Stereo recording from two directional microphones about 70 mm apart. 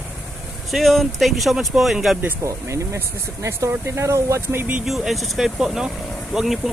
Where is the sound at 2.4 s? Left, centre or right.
Right.